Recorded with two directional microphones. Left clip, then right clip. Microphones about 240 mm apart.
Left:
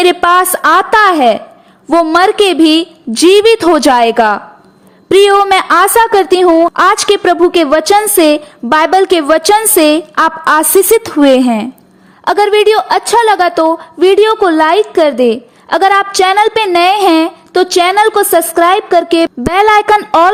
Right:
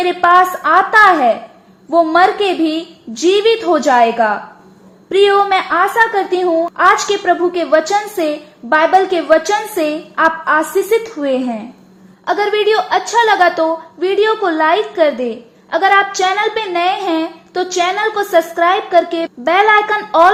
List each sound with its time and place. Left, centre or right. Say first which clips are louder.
0.0 s a woman's voice: left 2 dB; left